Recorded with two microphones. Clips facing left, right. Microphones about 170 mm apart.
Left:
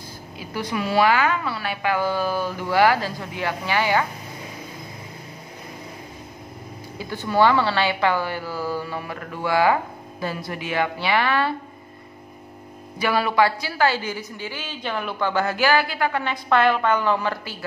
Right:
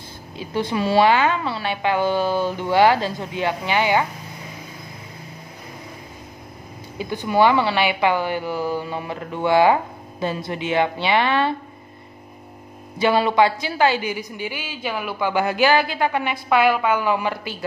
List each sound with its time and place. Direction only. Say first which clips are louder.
0.4 s a woman's voice: right 4 dB; 25° right (ahead or behind)
7.0 s a woman's voice: right 2 dB; 15° right (ahead or behind)
13.0 s a woman's voice: right 3 dB; 25° right (ahead or behind)